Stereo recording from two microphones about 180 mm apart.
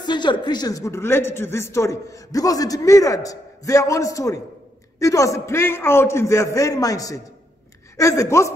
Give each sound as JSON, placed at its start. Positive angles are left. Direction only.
{"t": 0.0, "sound": "a man's voice", "side_deg": 25}